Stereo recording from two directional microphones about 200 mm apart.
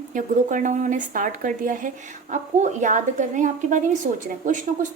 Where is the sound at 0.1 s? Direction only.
40° right (ahead or behind).